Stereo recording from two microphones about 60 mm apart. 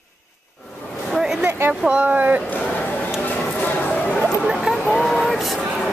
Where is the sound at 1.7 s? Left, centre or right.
Right.